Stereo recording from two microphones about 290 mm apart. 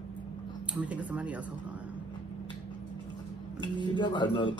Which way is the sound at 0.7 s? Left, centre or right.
Centre.